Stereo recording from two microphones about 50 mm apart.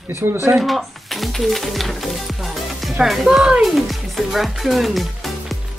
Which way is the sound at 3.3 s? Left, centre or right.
Centre.